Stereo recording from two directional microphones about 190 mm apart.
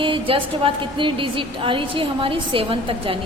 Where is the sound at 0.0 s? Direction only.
25° right (ahead or behind).